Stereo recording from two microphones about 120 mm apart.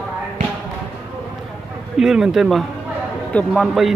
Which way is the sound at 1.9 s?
5° right (ahead or behind).